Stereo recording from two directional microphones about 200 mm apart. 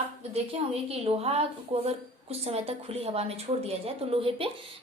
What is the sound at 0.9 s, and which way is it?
A woman's voice, 30° right (ahead or behind).